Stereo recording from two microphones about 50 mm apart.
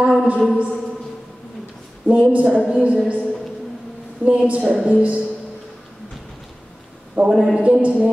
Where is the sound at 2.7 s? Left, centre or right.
Right.